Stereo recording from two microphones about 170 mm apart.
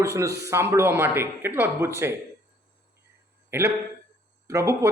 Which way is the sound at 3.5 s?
15° right (ahead or behind).